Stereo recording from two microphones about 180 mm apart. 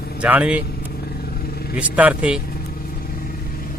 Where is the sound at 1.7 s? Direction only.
10° right (ahead or behind).